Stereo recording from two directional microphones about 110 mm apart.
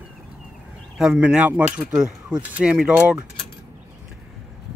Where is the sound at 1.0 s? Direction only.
5° right (ahead or behind).